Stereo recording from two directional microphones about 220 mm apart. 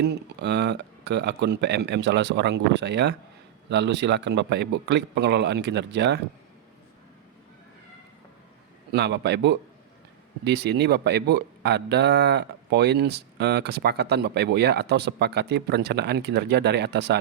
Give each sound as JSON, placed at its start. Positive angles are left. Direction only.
{"t": 0.0, "sound": "speech", "side_deg": -50}
{"t": 8.9, "sound": "speech", "side_deg": -50}